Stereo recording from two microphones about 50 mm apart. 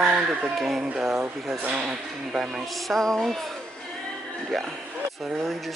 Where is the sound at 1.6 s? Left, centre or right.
Right.